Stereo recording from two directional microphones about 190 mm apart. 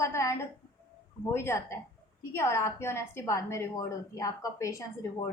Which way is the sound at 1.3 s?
15° left (ahead or behind).